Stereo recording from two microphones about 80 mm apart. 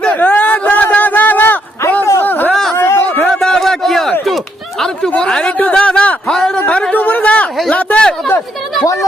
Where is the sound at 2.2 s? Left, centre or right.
Left.